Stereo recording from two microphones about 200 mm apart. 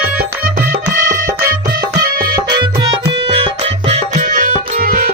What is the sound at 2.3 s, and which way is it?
Music, 20° right (ahead or behind).